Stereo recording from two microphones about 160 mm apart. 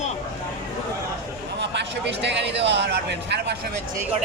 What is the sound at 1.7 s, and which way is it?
Speech, 90° right.